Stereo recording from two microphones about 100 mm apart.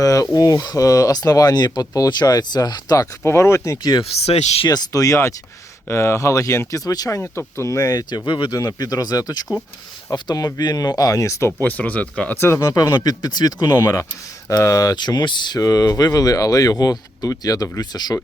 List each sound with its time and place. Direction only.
0.0 s speech: 35° left (ahead or behind)
3.2 s speech: 25° left (ahead or behind)
4.2 s speech: 90° left
4.6 s speech: 40° left (ahead or behind)
7.2 s speech: 25° left (ahead or behind); by 8.5 s 55° left (ahead or behind)
8.5 s speech: 40° left (ahead or behind)
11.6 s speech: 15° left (ahead or behind)
12.4 s speech: 25° left (ahead or behind)
13.0 s speech: 40° left (ahead or behind)
13.7 s speech: 25° left (ahead or behind)
14.6 s speech: 35° left (ahead or behind)